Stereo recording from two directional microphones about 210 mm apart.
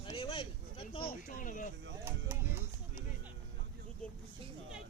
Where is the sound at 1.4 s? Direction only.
40° left (ahead or behind).